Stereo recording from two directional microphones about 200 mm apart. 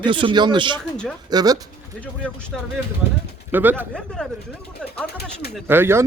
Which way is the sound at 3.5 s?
10° right (ahead or behind).